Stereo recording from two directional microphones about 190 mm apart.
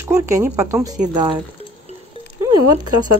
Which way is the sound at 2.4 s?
20° right (ahead or behind).